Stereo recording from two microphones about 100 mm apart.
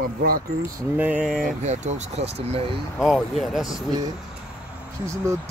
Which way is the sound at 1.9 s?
90° right.